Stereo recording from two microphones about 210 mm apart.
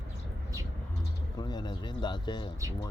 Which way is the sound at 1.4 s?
20° left (ahead or behind).